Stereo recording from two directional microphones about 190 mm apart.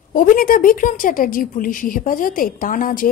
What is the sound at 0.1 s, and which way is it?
Speech, 45° left (ahead or behind).